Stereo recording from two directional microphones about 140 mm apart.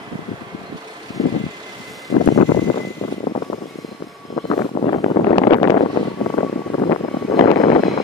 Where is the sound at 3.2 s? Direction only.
50° left (ahead or behind).